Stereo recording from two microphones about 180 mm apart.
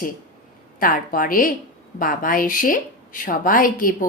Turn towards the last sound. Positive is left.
turn(degrees=50)  # may be behind; listen again after turning